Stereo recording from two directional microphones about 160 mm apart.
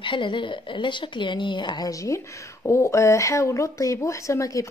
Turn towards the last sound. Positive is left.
turn(degrees=20)  # may be behind; listen again after turning